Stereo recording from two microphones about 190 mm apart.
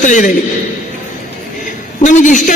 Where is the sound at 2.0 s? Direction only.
40° left (ahead or behind).